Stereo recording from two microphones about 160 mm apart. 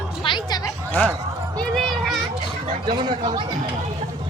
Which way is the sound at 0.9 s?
10° left (ahead or behind).